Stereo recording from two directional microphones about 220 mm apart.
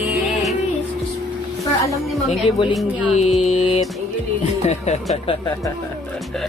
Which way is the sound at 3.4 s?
30° left (ahead or behind).